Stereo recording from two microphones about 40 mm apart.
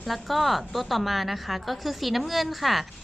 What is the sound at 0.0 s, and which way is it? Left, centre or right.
A woman's voice, centre.